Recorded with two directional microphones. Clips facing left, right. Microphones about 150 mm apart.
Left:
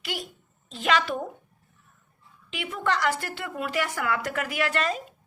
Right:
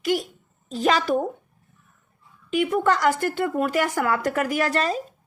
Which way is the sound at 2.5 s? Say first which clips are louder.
Right 8 dB; 45° right (ahead or behind).